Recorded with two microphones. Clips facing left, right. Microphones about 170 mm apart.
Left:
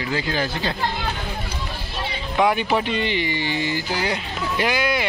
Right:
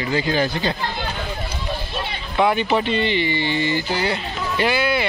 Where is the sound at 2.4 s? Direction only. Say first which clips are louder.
Right 1 dB; 5° left (ahead or behind).